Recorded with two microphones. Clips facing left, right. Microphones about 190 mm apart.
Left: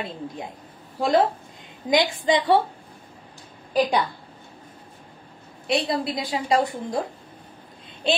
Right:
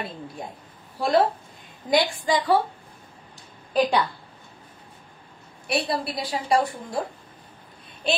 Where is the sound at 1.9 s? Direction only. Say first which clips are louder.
Left 2 dB; 20° left (ahead or behind).